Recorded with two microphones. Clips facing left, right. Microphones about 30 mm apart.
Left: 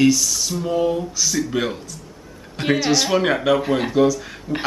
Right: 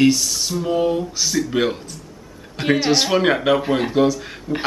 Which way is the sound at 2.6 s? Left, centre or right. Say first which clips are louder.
Right 1 dB; centre.